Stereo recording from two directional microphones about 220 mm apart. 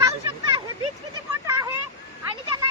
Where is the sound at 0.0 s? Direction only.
20° right (ahead or behind).